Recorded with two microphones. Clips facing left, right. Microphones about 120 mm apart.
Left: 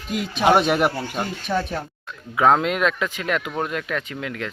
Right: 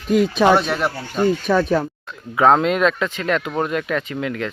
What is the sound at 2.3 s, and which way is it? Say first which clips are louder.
Speech: right 3 dB; centre (ahead or behind).